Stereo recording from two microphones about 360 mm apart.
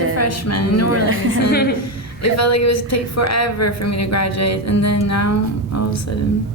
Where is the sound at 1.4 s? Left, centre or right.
Left.